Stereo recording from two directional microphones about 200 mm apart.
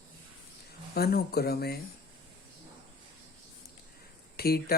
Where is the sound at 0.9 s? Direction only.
50° left (ahead or behind).